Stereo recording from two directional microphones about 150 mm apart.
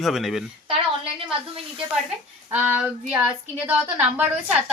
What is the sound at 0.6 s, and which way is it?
Speech, 40° right (ahead or behind).